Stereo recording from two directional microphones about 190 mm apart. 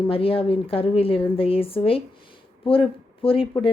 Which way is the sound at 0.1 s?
30° left (ahead or behind).